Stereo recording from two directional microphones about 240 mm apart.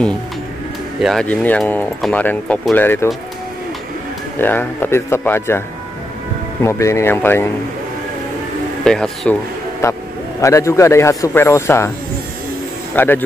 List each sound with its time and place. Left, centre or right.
1.0 s speech: centre
4.4 s speech: centre
6.6 s speech: centre
8.8 s a man's voice: centre
12.9 s speech: centre